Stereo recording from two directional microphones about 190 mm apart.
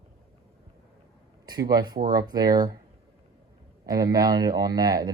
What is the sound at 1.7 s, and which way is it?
Speech, 20° right (ahead or behind).